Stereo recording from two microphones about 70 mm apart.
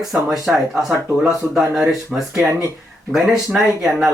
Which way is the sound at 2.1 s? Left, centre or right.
Centre.